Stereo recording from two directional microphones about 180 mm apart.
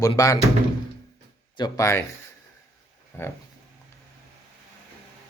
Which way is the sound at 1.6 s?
15° left (ahead or behind).